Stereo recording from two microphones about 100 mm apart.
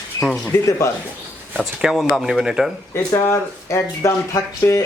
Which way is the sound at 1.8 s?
Centre (ahead or behind).